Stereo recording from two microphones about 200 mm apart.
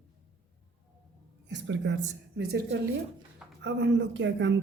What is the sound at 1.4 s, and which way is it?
Speech, 65° right (ahead or behind).